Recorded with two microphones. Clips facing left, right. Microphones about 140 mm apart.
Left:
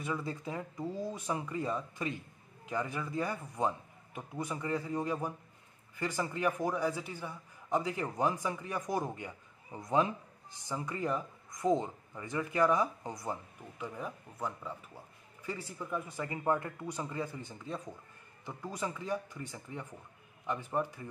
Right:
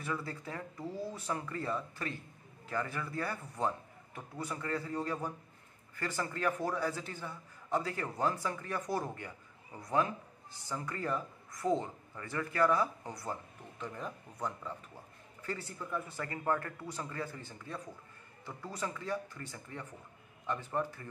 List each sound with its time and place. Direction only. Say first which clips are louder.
0.0 s speech: left 2 dB; 20° left (ahead or behind)
15.8 s speech: left 1 dB; 15° left (ahead or behind)